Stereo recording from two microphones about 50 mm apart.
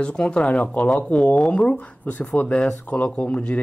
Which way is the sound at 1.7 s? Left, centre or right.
Left.